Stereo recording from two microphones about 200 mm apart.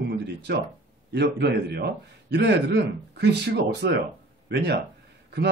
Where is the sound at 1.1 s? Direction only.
55° right (ahead or behind).